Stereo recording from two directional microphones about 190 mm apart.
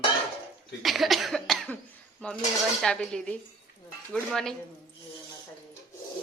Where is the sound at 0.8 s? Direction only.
Centre (ahead or behind).